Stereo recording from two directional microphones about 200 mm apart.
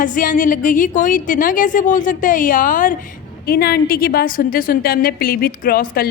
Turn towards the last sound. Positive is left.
turn(degrees=45)  # may be behind; listen again after turning